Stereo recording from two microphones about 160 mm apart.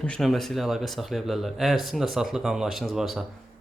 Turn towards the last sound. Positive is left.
turn(degrees=0)  # may be behind; listen again after turning